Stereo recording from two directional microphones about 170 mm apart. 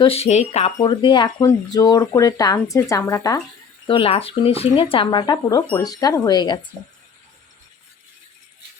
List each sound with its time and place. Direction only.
0.0 s speech: 35° left (ahead or behind)
0.8 s speech: 30° left (ahead or behind)
3.8 s speech: 30° left (ahead or behind)